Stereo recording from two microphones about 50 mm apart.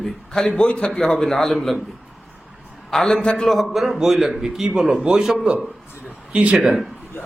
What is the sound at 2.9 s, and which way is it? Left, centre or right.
Speech, centre.